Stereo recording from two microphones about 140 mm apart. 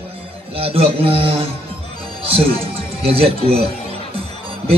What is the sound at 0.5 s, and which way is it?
Speech, 45° right (ahead or behind).